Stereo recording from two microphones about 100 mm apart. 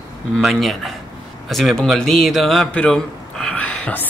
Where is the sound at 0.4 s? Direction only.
Centre (ahead or behind).